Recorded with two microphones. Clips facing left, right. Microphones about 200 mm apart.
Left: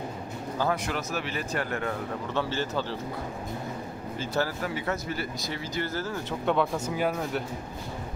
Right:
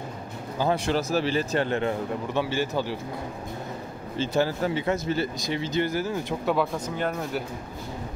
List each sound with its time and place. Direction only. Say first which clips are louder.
0.7 s a man's voice: right 8 dB; 30° right (ahead or behind); by 3.0 s 10° right (ahead or behind)
4.2 s a man's voice: right 5 dB; 20° right (ahead or behind)
6.4 s speech: left 1 dB; 5° right (ahead or behind)